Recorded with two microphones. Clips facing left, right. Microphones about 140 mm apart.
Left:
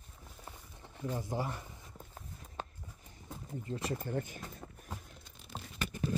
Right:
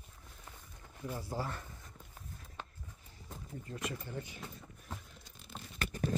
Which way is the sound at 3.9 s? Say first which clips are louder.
Left 6 dB; 45° left (ahead or behind).